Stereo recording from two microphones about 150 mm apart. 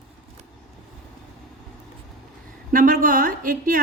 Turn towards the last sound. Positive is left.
turn(degrees=-70)  # may be behind; listen again after turning